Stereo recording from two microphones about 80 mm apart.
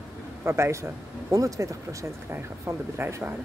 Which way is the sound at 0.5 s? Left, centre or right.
Right.